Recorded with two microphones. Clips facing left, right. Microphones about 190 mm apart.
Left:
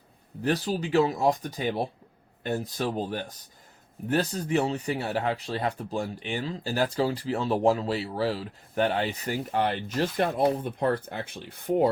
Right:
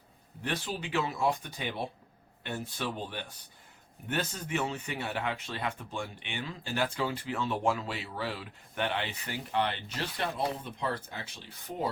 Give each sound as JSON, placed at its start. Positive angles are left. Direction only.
{"t": 0.4, "sound": "speech", "side_deg": 40}